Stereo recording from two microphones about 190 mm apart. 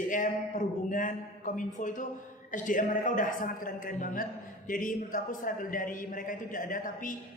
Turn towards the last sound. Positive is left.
turn(degrees=45)  # may be behind; listen again after turning